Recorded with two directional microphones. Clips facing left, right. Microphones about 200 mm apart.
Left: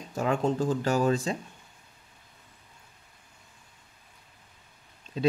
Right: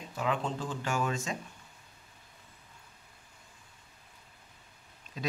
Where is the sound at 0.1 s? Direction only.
45° left (ahead or behind).